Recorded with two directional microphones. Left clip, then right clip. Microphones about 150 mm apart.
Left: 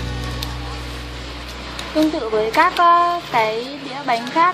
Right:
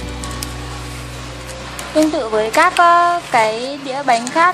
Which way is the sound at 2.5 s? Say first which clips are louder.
Right 3 dB; 25° right (ahead or behind).